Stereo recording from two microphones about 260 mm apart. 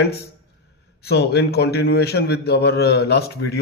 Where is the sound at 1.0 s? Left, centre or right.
Left.